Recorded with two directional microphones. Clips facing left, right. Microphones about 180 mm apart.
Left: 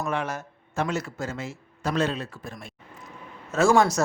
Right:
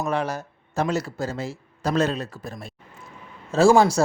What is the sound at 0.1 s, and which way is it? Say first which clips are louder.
Speech: right 3 dB; 35° right (ahead or behind).